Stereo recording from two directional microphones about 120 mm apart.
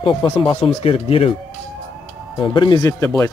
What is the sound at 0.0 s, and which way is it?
Speech, 40° left (ahead or behind).